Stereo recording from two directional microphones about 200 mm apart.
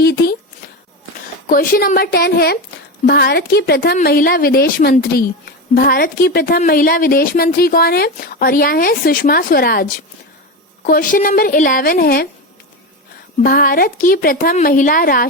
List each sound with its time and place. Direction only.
0.0 s a sound: 50° left (ahead or behind)
1.5 s a woman's voice: 45° left (ahead or behind)
13.4 s a woman's voice: 45° left (ahead or behind)